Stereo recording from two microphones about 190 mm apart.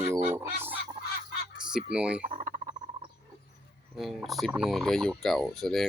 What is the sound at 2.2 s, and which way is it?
Speech, 45° right (ahead or behind).